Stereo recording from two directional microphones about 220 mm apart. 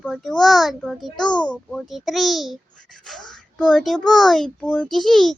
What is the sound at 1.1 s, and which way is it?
Speech, 20° left (ahead or behind).